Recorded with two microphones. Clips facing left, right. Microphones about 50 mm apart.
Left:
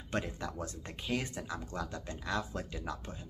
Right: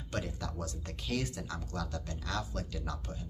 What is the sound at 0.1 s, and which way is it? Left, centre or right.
Speech, left.